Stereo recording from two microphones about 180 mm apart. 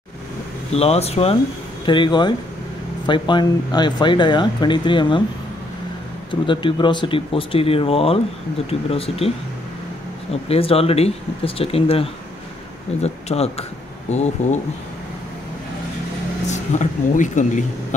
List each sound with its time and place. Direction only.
0.7 s speech: 35° left (ahead or behind)
6.4 s speech: 25° left (ahead or behind)
10.5 s speech: 30° left (ahead or behind)
16.4 s speech: 40° left (ahead or behind)